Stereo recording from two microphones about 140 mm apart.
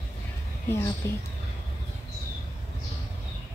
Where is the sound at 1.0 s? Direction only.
20° left (ahead or behind).